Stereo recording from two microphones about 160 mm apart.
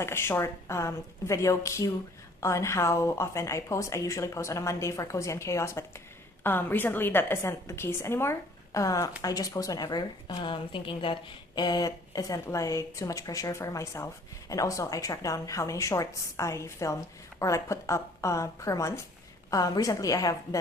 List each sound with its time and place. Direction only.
0.0 s speech: 15° left (ahead or behind)